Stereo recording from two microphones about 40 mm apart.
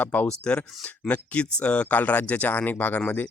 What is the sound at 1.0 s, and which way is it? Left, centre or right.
Speech, left.